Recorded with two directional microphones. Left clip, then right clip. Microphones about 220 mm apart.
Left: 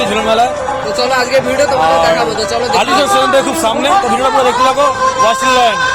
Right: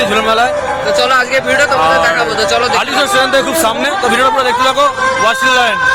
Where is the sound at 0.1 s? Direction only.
5° right (ahead or behind).